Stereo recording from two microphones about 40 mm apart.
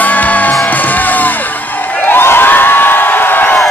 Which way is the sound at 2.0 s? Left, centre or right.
Left.